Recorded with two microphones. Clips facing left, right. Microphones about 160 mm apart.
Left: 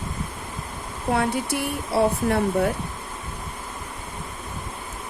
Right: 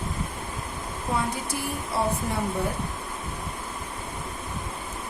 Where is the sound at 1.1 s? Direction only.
70° left (ahead or behind).